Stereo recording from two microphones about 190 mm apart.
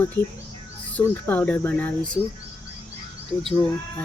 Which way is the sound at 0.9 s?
10° left (ahead or behind).